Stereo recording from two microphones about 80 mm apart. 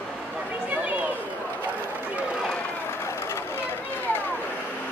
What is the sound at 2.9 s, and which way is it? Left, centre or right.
Vehicle, left.